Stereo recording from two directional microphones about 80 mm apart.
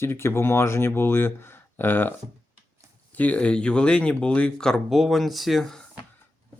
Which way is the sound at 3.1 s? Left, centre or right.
Centre.